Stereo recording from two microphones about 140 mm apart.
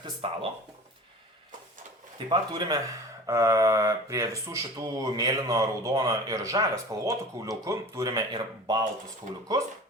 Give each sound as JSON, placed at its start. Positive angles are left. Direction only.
{"t": 0.2, "sound": "speech", "side_deg": -45}
{"t": 2.1, "sound": "speech", "side_deg": -30}